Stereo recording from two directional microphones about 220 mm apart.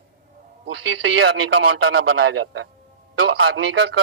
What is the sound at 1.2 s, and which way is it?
A man's voice, 55° right (ahead or behind).